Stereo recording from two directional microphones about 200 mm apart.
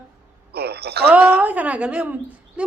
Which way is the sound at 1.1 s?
10° right (ahead or behind).